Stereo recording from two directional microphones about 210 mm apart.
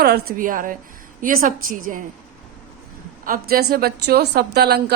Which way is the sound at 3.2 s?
45° right (ahead or behind).